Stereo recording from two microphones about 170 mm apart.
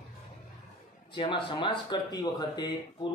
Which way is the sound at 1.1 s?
30° left (ahead or behind).